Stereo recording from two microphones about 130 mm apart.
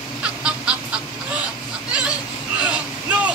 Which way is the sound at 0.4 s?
5° right (ahead or behind).